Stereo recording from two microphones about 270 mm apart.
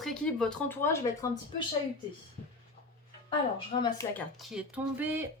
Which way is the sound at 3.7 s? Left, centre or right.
Centre.